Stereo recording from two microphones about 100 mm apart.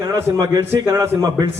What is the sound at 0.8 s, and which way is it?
Speech, 25° right (ahead or behind).